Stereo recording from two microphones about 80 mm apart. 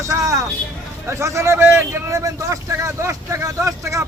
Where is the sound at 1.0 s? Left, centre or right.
Right.